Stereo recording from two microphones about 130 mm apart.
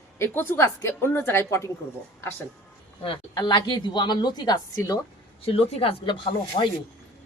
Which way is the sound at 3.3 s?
35° left (ahead or behind).